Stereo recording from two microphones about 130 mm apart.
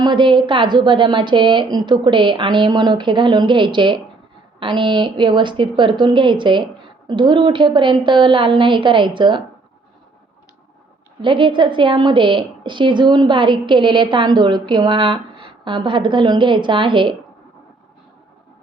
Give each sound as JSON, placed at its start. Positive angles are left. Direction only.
{"t": 0.0, "sound": "a woman's voice", "side_deg": -40}
{"t": 11.2, "sound": "a woman's voice", "side_deg": -40}